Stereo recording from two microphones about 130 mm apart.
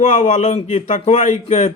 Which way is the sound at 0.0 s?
65° left (ahead or behind).